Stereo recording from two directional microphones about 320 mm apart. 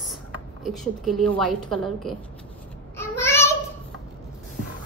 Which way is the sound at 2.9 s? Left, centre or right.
Centre.